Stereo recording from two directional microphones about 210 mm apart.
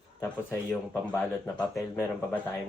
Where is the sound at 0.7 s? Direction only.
5° left (ahead or behind).